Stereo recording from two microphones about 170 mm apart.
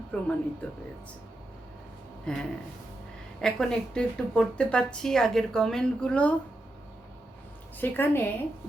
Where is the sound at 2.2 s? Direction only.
5° left (ahead or behind).